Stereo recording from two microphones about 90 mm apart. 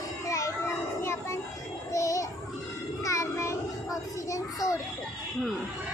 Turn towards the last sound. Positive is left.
turn(degrees=40)  # may be behind; listen again after turning